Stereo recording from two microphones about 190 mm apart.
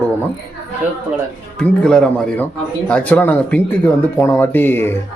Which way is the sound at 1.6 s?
5° left (ahead or behind).